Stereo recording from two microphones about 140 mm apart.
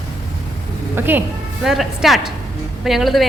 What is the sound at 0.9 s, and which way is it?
Speech, 15° right (ahead or behind).